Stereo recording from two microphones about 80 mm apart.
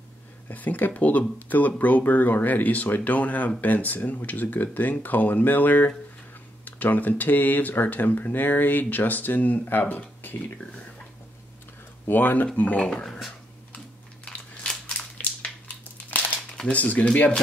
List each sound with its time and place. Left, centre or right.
0.5 s speech: left
12.1 s speech: left
12.8 s speech: centre
14.2 s crushing: centre
16.1 s crumpling: left
16.5 s speech: centre